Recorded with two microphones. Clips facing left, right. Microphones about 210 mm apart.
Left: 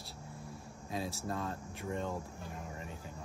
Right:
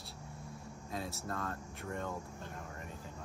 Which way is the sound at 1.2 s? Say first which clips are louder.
Left 2 dB; 25° left (ahead or behind).